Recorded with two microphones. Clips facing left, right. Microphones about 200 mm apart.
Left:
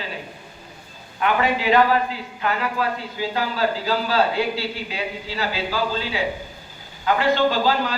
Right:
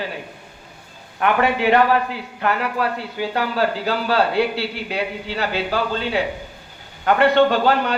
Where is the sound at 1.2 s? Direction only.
60° right (ahead or behind).